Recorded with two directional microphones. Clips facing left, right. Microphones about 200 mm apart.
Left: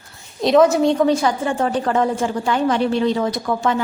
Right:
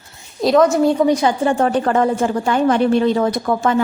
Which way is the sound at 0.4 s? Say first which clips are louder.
Right 1 dB; centre (ahead or behind).